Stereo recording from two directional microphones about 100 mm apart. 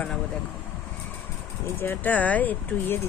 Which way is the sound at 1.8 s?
20° left (ahead or behind).